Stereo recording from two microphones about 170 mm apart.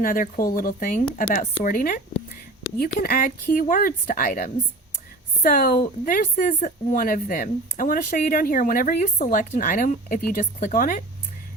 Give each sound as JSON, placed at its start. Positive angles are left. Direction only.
{"t": 0.0, "sound": "a woman's voice", "side_deg": 55}
{"t": 5.4, "sound": "a woman's voice", "side_deg": 60}